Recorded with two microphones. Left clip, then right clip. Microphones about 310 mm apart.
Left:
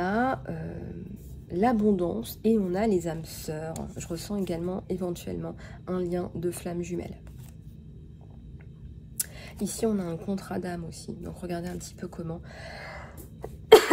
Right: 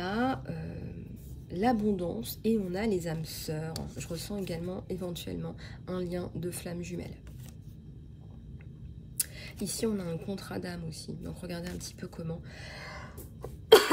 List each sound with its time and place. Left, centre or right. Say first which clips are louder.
0.0 s a sound: left 5 dB; centre
1.5 s a woman's voice: left 4 dB; centre
9.2 s a woman's voice: left 3 dB; centre
13.7 s cough: left 4 dB; centre